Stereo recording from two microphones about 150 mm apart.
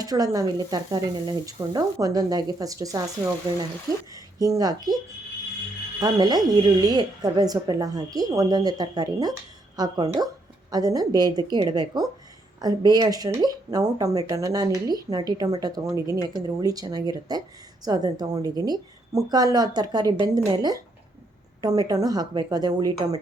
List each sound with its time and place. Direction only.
0.0 s speech: 25° right (ahead or behind)
6.0 s speech: 25° right (ahead or behind)